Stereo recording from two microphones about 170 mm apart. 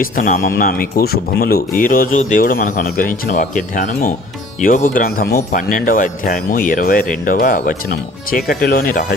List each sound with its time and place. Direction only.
0.0 s speech: 55° left (ahead or behind)